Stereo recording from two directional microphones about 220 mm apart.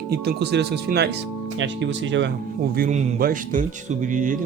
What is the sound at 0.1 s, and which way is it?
A man's voice, 50° right (ahead or behind).